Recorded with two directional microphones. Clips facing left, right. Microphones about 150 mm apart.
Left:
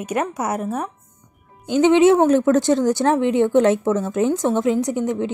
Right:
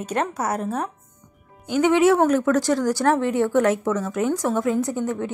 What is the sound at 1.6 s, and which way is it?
Speech, 25° left (ahead or behind).